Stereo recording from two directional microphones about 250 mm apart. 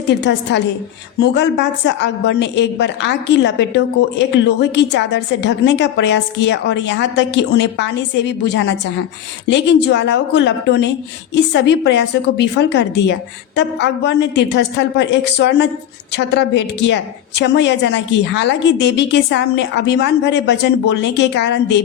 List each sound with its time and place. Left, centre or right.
0.2 s a woman's voice: left